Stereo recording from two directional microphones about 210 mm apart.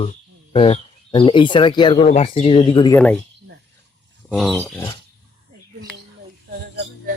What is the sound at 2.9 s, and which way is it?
Speech, 5° left (ahead or behind).